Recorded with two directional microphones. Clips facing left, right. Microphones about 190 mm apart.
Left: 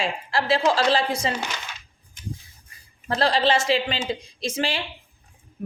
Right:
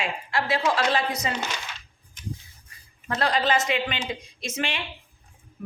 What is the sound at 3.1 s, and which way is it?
A woman's voice, 30° left (ahead or behind).